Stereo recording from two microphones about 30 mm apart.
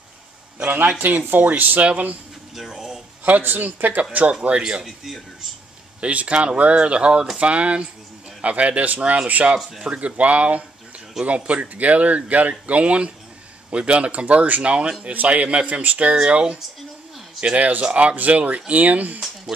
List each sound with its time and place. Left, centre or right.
0.7 s speech: right
2.7 s speech: centre
3.3 s speech: right
4.5 s speech: right
4.8 s a man's voice: centre
5.9 s speech: right
7.3 s a man's voice: right
14.6 s speech: right
16.3 s speech: right
17.6 s speech: right